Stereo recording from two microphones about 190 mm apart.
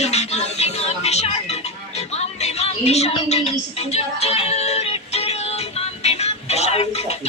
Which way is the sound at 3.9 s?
35° left (ahead or behind).